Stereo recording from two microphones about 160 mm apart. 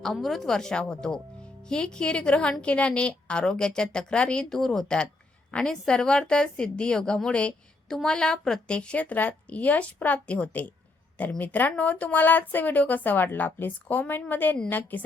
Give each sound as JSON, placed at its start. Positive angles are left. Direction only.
{"t": 0.0, "sound": "a woman's voice", "side_deg": 0}